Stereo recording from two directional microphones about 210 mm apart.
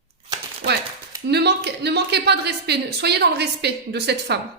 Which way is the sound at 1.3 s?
50° right (ahead or behind).